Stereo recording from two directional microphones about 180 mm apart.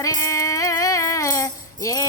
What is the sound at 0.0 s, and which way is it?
Music, 20° left (ahead or behind).